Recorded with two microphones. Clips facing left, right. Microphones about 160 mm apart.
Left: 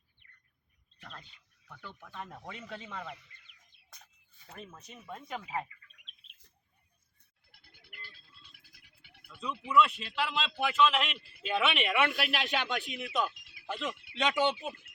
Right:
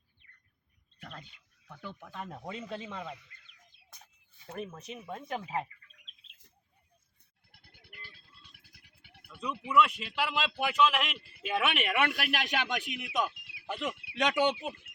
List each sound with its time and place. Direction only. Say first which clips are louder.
1.6 s speech: right 4 dB; 20° right (ahead or behind)
4.4 s speech: right 8 dB; 65° right (ahead or behind)
4.9 s speech: right 3 dB; 15° right (ahead or behind)
5.5 s speech: even; 35° right (ahead or behind)
7.5 s music: right 1 dB; 60° right (ahead or behind)
9.7 s speech: even; 10° right (ahead or behind)